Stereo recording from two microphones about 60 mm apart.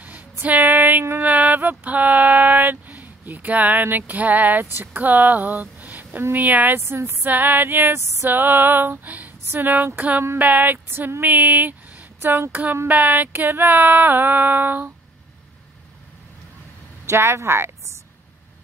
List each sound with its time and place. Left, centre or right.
0.0 s a sound: right
4.7 s a woman's voice: right
6.3 s a sound: right
6.8 s speech: right
7.2 s female singing: right
9.9 s a sound: right
10.9 s speech: right
12.8 s female singing: right
17.0 s speech: right